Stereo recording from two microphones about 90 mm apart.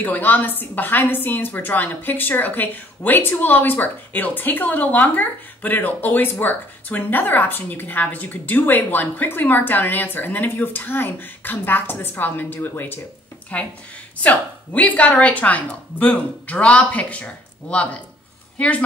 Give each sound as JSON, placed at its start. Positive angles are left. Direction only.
{"t": 0.0, "sound": "a woman's voice", "side_deg": 20}